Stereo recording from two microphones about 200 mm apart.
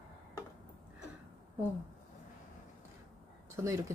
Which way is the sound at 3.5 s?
15° right (ahead or behind).